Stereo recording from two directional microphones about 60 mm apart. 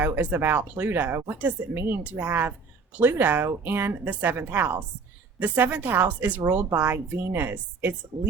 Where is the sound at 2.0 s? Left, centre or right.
Right.